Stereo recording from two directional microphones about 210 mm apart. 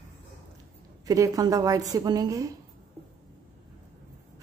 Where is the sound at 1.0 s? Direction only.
15° right (ahead or behind).